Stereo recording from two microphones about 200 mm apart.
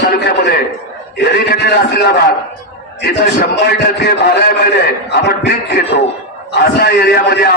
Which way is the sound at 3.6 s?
50° left (ahead or behind).